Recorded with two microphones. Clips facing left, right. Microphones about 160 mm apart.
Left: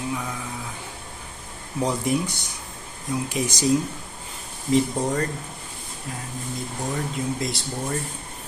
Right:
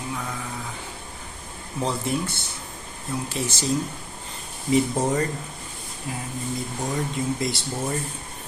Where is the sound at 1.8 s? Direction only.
15° left (ahead or behind).